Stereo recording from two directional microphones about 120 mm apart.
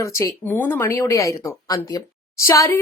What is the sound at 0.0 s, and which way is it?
Speech, 25° left (ahead or behind).